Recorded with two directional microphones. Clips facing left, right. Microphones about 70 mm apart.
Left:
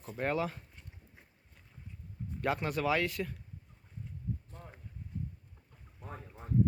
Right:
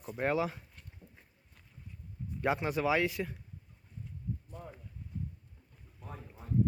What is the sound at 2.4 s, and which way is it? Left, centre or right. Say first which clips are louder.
Speech: right 1 dB; centre.